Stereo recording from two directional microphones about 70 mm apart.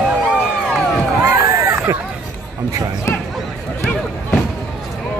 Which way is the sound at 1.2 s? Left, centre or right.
Right.